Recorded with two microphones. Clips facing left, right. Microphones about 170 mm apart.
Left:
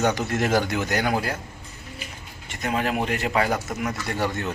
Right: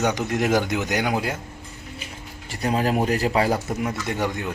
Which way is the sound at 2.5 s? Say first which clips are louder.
Right 3 dB; 35° right (ahead or behind).